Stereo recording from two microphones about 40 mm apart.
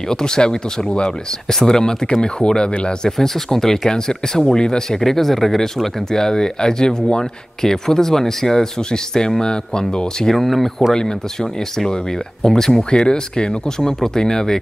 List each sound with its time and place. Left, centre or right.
0.1 s speech: centre
3.1 s speech: centre
10.3 s speech: centre
10.9 s speech: centre
12.4 s speech: centre
12.9 s speech: left